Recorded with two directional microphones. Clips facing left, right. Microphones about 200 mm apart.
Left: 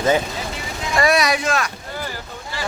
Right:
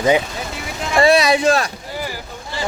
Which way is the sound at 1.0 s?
25° right (ahead or behind).